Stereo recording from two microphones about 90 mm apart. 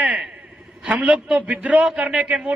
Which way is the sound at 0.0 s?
10° right (ahead or behind).